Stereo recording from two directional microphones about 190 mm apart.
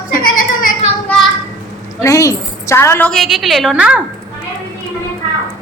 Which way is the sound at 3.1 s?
Centre (ahead or behind).